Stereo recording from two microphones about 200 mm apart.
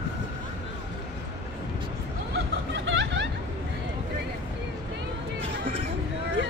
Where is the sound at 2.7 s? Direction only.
70° right (ahead or behind).